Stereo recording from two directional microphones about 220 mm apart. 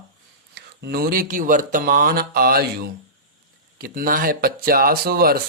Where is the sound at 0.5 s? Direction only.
45° right (ahead or behind).